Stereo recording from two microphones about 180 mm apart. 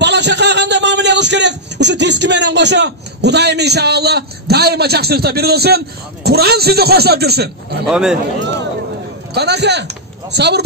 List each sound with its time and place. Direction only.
0.0 s speech: 70° right (ahead or behind)
7.8 s a man's voice: 5° right (ahead or behind)
9.3 s speech: 65° right (ahead or behind)